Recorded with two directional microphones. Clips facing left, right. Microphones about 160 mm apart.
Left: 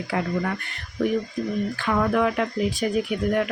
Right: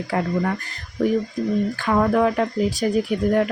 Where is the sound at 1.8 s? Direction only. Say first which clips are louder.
Right 3 dB; 40° right (ahead or behind).